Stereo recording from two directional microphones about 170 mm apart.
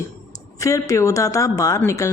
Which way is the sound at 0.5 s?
20° left (ahead or behind).